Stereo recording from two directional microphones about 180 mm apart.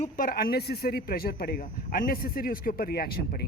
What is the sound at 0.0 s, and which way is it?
Speech, 50° left (ahead or behind).